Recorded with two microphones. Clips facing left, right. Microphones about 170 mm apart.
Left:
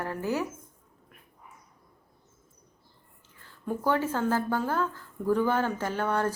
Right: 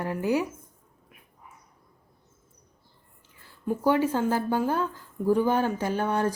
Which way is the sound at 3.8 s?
15° right (ahead or behind).